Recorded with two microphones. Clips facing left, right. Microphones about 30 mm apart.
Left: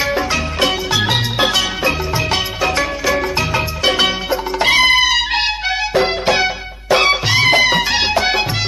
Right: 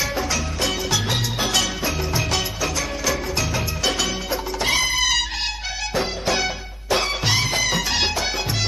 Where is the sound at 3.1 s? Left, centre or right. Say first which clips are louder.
Left 7 dB; left.